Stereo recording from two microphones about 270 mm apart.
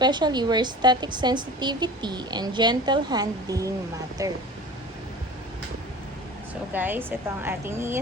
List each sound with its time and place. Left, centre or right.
0.0 s a woman's voice: centre
6.7 s a woman's voice: centre